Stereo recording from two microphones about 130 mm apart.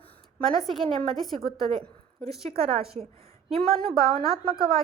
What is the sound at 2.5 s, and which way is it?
Speech, 45° right (ahead or behind).